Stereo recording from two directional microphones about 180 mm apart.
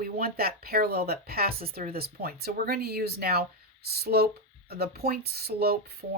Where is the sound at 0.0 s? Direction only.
55° right (ahead or behind).